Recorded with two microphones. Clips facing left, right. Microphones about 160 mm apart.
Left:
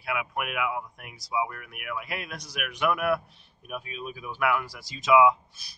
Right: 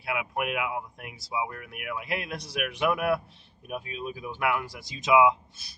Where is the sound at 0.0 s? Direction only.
25° right (ahead or behind).